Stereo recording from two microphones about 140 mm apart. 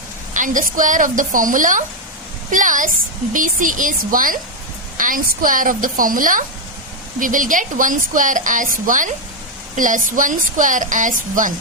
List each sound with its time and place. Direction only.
0.3 s speech: 70° right (ahead or behind)